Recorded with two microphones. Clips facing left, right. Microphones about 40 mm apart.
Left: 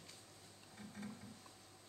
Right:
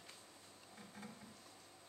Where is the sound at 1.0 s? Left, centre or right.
Centre.